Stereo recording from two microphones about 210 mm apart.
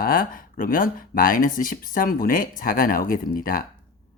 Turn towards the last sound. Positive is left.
turn(degrees=40)  # may be behind; listen again after turning